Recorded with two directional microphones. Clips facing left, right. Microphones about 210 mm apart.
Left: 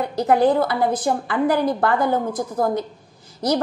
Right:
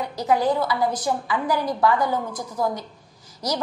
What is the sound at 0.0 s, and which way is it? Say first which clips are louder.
A woman's voice: left 5 dB; 55° left (ahead or behind).